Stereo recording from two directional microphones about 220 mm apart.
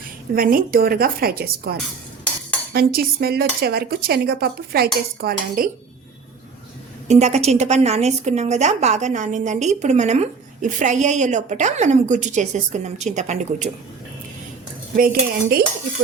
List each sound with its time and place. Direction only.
0.3 s cutlery: 40° right (ahead or behind)
2.7 s cutlery: 45° right (ahead or behind)
7.1 s a woman's voice: 30° right (ahead or behind)
14.9 s cutlery: 45° right (ahead or behind)